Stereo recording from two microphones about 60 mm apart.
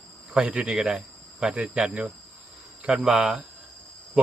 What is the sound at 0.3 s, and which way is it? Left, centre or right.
Speech, centre.